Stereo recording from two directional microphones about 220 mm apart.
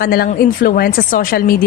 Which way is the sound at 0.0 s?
45° left (ahead or behind).